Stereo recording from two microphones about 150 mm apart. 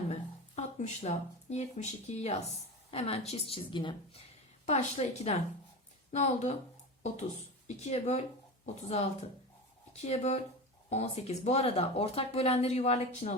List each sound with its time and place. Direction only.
0.1 s speech: 50° left (ahead or behind)
3.5 s speech: 30° left (ahead or behind)
4.6 s speech: 50° left (ahead or behind)